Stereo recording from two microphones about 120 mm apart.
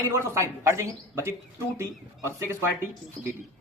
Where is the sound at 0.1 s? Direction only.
25° right (ahead or behind).